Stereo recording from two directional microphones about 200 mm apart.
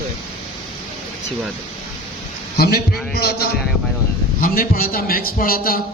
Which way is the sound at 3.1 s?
50° left (ahead or behind).